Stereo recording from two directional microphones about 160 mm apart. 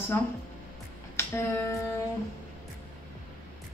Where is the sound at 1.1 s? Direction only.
15° left (ahead or behind).